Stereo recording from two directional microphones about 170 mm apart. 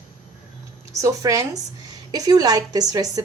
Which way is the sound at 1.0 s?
20° right (ahead or behind).